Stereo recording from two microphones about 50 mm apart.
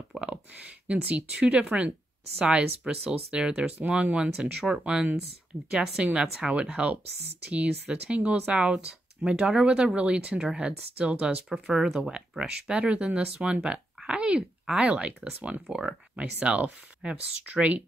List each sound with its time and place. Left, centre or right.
0.2 s speech: right
14.0 s oink: right
14.8 s speech: right